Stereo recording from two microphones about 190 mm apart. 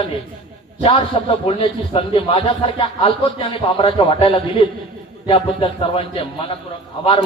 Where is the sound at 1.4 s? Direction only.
30° left (ahead or behind).